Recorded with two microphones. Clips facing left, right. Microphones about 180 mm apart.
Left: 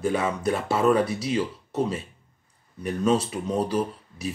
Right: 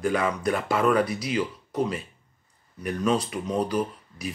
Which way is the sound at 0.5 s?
25° left (ahead or behind).